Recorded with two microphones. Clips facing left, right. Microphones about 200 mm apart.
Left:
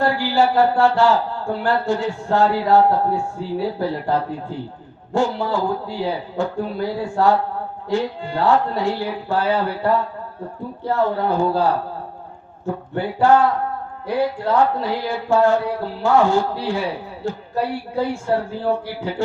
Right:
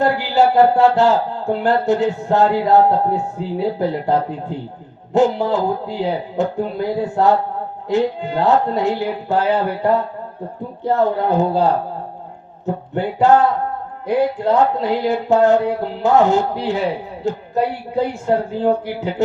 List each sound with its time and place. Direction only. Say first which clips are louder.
0.0 s speech: right 3 dB; 20° right (ahead or behind)